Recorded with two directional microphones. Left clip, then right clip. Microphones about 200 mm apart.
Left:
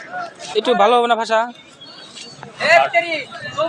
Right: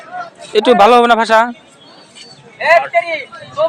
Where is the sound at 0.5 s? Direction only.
50° right (ahead or behind).